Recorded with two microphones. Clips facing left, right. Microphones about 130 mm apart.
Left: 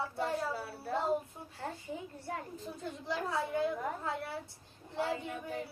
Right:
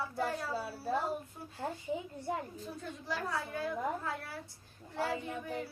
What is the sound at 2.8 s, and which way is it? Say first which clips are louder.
A woman's voice: left 2 dB; 25° left (ahead or behind).